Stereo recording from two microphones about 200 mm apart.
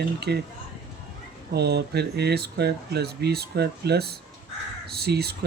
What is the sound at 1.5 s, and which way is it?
Speech, 55° right (ahead or behind).